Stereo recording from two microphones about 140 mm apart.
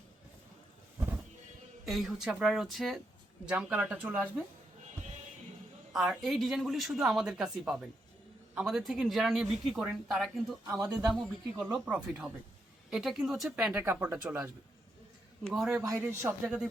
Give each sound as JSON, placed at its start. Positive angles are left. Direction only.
{"t": 1.8, "sound": "speech", "side_deg": 0}
{"t": 5.9, "sound": "speech", "side_deg": 0}
{"t": 15.4, "sound": "speech", "side_deg": -5}
{"t": 15.9, "sound": "speech", "side_deg": -20}
{"t": 16.2, "sound": "speech", "side_deg": -5}